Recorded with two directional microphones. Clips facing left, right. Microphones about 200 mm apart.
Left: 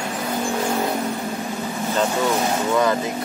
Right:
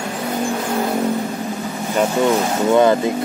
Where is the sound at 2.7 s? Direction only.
25° right (ahead or behind).